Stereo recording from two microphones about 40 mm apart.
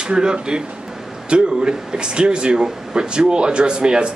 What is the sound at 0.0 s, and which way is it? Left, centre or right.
Speech, right.